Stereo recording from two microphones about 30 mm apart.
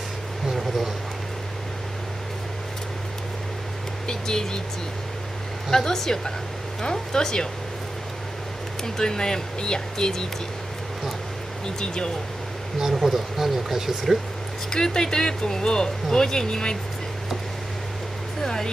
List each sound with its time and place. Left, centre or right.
4.1 s speech: left
5.7 s speech: centre
8.8 s speech: centre
11.6 s speech: left
12.7 s speech: centre
14.7 s speech: left
18.4 s music: centre